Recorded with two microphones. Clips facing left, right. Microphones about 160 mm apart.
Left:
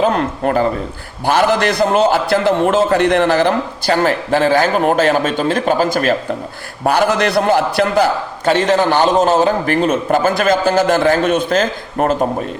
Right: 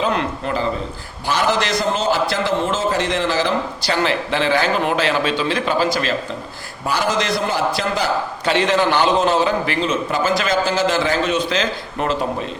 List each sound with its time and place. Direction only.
0.0 s a man's voice: 45° left (ahead or behind)
8.4 s a man's voice: 45° left (ahead or behind)